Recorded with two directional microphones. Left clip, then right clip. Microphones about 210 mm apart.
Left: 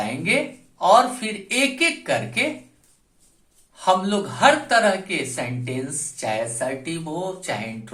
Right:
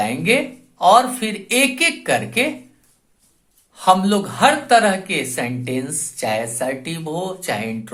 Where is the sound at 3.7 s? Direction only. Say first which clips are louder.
Right 5 dB; 45° right (ahead or behind).